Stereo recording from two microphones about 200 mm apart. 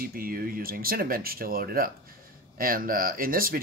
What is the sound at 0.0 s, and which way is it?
Speech, 45° right (ahead or behind).